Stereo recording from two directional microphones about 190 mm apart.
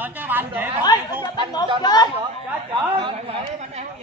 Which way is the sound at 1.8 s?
20° left (ahead or behind).